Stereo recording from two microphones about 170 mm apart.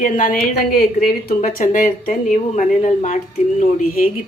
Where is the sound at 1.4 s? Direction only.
50° left (ahead or behind).